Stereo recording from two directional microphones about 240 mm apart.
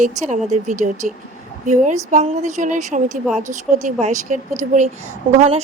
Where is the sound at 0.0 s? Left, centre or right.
Right.